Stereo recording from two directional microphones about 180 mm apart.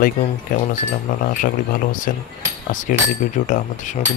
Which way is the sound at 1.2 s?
50° left (ahead or behind).